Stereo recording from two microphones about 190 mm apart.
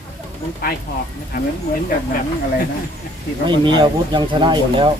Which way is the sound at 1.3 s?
45° left (ahead or behind).